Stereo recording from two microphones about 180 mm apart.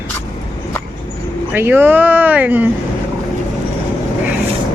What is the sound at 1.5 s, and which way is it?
Speech, 10° right (ahead or behind).